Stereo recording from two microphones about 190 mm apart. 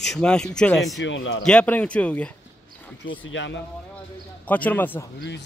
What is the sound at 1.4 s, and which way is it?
Speech, 5° left (ahead or behind).